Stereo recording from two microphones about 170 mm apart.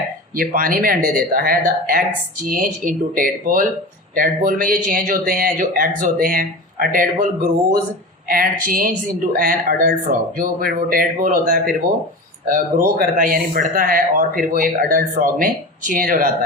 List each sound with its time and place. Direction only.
0.3 s speech: 55° right (ahead or behind)
8.3 s speech: 55° right (ahead or behind)